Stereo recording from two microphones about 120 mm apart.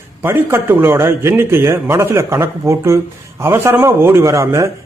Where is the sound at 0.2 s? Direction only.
20° right (ahead or behind).